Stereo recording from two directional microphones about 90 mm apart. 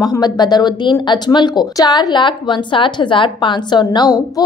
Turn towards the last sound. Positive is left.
turn(degrees=50)  # may be behind; listen again after turning